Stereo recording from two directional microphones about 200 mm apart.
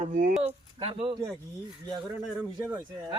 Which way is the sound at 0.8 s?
30° right (ahead or behind).